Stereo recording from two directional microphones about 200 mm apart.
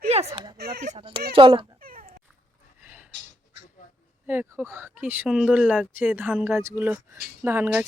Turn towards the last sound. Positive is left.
turn(degrees=-10)  # may be behind; listen again after turning